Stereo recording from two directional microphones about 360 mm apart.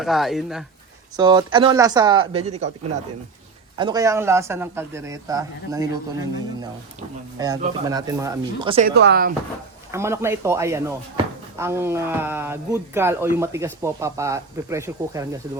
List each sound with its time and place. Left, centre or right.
0.0 s speech: centre
1.1 s speech: centre
3.8 s speech: centre
7.3 s speech: centre
8.9 s speech: right
9.9 s speech: centre